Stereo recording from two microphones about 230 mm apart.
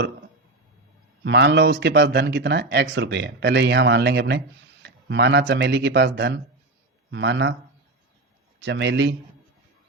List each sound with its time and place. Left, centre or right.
1.2 s speech: right
8.6 s speech: right